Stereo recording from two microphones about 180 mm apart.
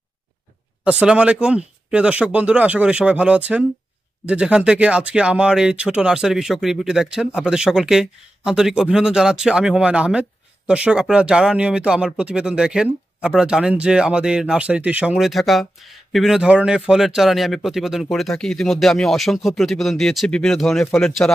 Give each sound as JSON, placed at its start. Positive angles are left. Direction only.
{"t": 0.8, "sound": "speech", "side_deg": -5}